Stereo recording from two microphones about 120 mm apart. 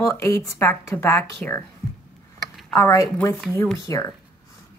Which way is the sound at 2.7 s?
25° left (ahead or behind).